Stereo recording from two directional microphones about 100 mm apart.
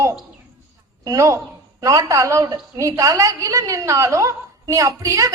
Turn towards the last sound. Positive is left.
turn(degrees=-35)  # may be behind; listen again after turning